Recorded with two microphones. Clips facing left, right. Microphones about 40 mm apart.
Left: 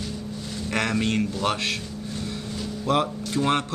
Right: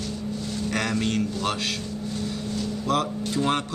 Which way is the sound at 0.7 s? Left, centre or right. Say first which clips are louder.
Left 2 dB; left.